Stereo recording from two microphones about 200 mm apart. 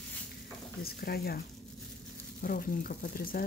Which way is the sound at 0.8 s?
50° left (ahead or behind).